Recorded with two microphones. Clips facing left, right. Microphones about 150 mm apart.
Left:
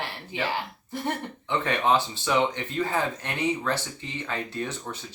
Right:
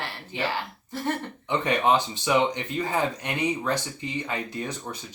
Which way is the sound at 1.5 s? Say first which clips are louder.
Right 1 dB; 15° right (ahead or behind).